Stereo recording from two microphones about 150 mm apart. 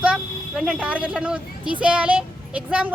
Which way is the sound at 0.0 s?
5° right (ahead or behind).